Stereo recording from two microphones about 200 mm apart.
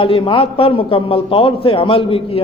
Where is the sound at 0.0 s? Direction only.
25° left (ahead or behind).